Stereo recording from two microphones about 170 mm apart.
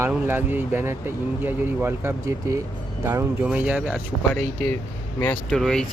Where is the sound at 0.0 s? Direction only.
15° right (ahead or behind).